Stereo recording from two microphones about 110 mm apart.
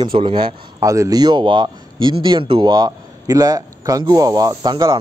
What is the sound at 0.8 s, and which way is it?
A man's voice, 30° right (ahead or behind).